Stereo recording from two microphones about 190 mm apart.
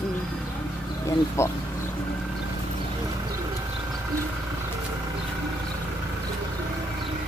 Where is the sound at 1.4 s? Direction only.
15° left (ahead or behind).